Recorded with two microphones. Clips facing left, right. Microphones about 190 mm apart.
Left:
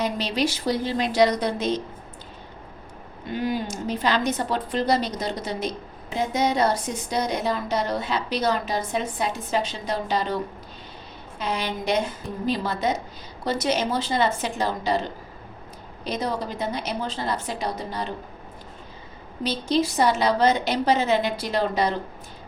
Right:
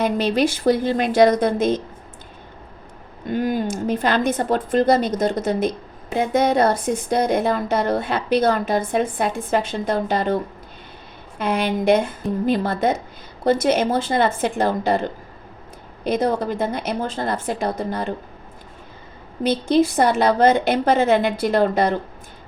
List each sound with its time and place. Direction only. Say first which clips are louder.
0.0 s a woman's voice: right 6 dB; 55° right (ahead or behind)
3.2 s a woman's voice: right 5 dB; 50° right (ahead or behind)
19.4 s a woman's voice: right 6 dB; 55° right (ahead or behind)